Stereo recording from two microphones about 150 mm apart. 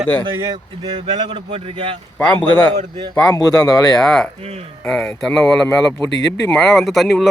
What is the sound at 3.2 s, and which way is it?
Speech, 25° left (ahead or behind).